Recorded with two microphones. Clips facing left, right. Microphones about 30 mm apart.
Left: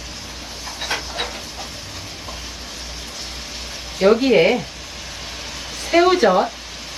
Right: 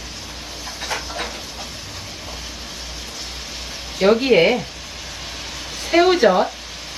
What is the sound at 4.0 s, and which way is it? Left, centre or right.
Speech, centre.